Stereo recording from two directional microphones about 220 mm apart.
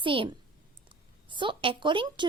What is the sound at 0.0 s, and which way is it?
A woman's voice, 25° right (ahead or behind).